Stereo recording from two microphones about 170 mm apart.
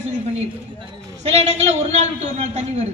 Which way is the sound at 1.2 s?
40° right (ahead or behind).